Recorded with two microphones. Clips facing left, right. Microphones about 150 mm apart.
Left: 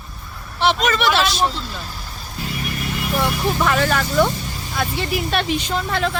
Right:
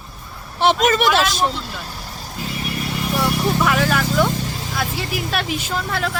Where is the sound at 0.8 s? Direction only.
45° right (ahead or behind).